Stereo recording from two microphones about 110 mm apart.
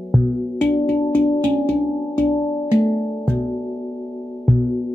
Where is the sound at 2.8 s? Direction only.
15° left (ahead or behind).